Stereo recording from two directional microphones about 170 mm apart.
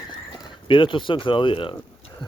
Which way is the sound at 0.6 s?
30° left (ahead or behind).